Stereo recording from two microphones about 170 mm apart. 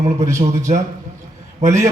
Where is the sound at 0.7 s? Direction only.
40° right (ahead or behind).